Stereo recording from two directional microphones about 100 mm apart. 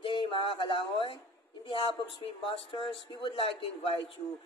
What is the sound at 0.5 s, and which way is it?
A man's voice, 60° left (ahead or behind).